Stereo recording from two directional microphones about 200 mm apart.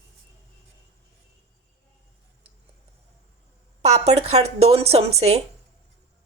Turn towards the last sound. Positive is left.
turn(degrees=-30)  # may be behind; listen again after turning